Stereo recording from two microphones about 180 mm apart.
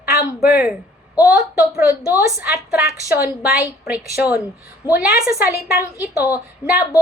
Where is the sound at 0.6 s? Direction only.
10° right (ahead or behind).